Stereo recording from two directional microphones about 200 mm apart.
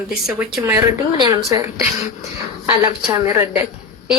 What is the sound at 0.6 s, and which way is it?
A man's voice, 15° right (ahead or behind).